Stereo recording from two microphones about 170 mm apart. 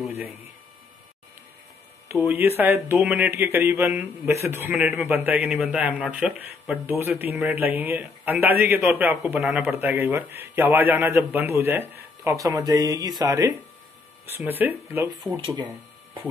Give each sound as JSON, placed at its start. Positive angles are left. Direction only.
{"t": 2.2, "sound": "speech", "side_deg": -15}
{"t": 14.2, "sound": "speech", "side_deg": -10}
{"t": 15.3, "sound": "speech", "side_deg": -25}